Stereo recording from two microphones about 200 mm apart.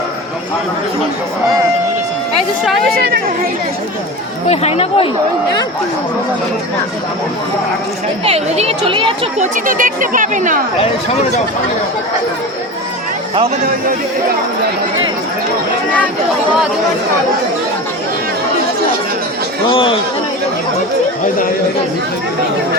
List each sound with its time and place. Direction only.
3.0 s speech: 50° right (ahead or behind)
4.4 s speech: 30° left (ahead or behind)
8.2 s a woman's voice: 30° right (ahead or behind)
9.4 s speech: 40° right (ahead or behind)
10.8 s speech: 30° left (ahead or behind)
19.6 s speech: 25° left (ahead or behind)